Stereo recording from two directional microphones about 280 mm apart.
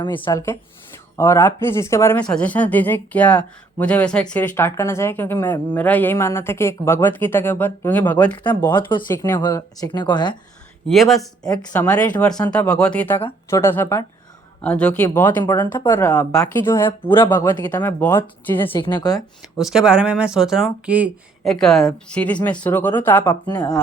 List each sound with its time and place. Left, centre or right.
0.0 s speech: centre
8.6 s speech: centre
10.8 s speech: centre
11.4 s speech: centre
19.5 s speech: centre